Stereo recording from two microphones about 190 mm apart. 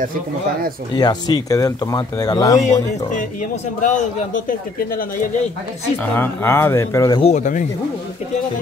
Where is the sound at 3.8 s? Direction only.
40° left (ahead or behind).